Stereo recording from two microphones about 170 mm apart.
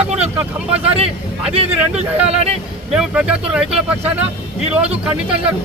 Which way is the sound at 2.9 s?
5° right (ahead or behind).